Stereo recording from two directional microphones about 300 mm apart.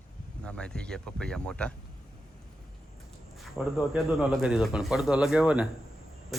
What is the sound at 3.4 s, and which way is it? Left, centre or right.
Speech, centre.